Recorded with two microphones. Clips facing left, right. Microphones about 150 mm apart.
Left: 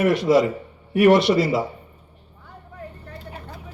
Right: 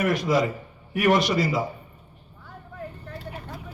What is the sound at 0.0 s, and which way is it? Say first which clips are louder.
Speech: left 5 dB; 30° left (ahead or behind).